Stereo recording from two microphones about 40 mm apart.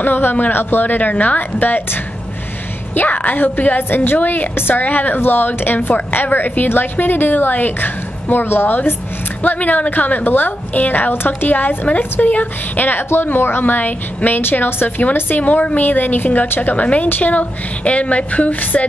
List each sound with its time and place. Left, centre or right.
0.0 s a woman's voice: left
2.9 s a woman's voice: left
4.6 s a woman's voice: left
4.8 s a woman's voice: left
5.8 s a woman's voice: left
6.1 s a woman's voice: left
9.4 s a woman's voice: left
13.3 s a woman's voice: left
16.7 s a woman's voice: left